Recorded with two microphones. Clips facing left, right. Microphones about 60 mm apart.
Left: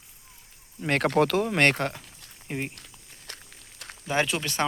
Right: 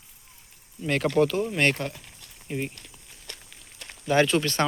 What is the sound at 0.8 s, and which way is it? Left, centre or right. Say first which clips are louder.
Speech: even; left.